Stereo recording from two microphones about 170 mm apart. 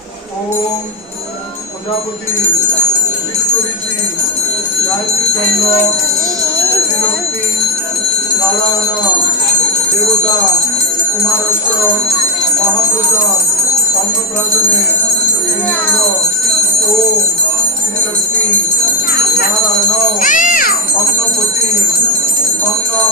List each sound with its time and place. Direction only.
20.1 s cat: 50° left (ahead or behind)